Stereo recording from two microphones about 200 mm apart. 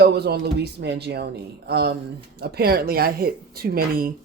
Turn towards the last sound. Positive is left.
turn(degrees=-45)  # may be behind; listen again after turning